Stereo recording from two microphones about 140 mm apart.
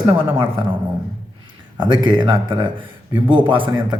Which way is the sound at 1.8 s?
35° right (ahead or behind).